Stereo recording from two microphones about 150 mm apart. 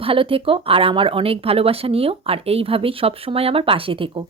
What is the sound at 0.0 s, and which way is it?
Speech, 35° right (ahead or behind).